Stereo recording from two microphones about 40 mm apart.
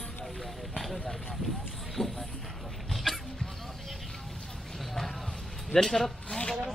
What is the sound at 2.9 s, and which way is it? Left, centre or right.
Dog, centre.